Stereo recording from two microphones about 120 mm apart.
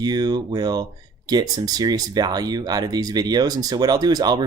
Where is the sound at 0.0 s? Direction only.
35° right (ahead or behind).